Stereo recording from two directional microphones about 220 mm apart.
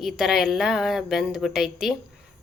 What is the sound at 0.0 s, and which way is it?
A woman's voice, centre (ahead or behind).